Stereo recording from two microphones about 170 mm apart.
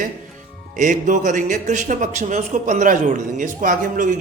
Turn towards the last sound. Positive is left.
turn(degrees=-50)  # may be behind; listen again after turning